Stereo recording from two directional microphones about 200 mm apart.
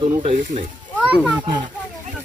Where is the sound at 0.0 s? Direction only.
35° right (ahead or behind).